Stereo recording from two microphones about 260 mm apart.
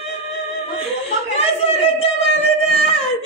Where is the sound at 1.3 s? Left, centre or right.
Left.